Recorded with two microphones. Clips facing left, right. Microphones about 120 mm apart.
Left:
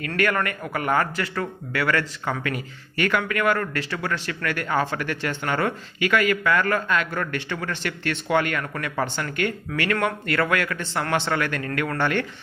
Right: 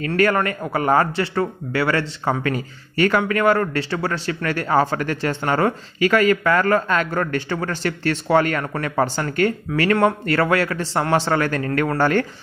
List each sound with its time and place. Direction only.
0.0 s a man's voice: 30° right (ahead or behind)